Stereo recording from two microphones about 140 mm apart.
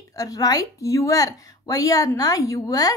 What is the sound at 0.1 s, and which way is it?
A woman's voice, 25° left (ahead or behind).